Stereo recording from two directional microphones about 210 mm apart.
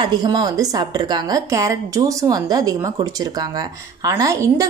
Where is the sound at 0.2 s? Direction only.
20° right (ahead or behind).